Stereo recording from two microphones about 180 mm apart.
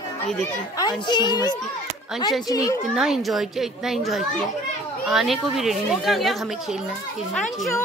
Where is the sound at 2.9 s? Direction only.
Centre (ahead or behind).